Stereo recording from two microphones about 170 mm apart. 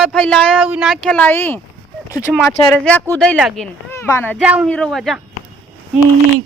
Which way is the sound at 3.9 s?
10° left (ahead or behind).